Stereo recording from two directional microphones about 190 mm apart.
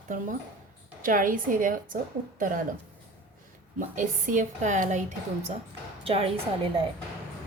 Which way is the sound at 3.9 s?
40° right (ahead or behind).